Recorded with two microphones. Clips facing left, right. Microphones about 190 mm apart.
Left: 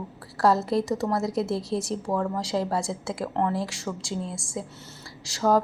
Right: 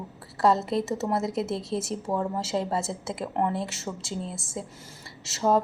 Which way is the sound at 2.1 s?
25° right (ahead or behind).